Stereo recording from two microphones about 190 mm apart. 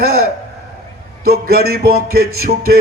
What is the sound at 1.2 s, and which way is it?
A man's voice, 55° right (ahead or behind).